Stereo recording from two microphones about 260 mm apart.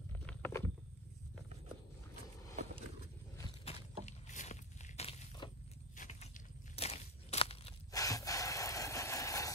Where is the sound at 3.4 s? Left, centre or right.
Centre.